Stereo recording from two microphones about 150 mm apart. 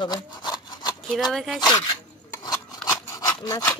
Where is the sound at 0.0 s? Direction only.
30° left (ahead or behind).